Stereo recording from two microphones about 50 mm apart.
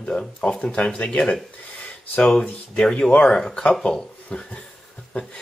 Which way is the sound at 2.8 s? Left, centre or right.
Centre.